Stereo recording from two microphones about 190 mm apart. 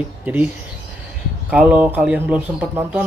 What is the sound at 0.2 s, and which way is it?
Speech, 10° right (ahead or behind).